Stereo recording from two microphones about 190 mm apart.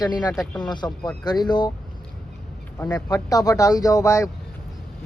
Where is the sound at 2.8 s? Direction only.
15° left (ahead or behind).